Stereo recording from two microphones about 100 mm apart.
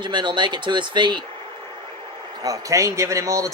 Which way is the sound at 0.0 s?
50° right (ahead or behind).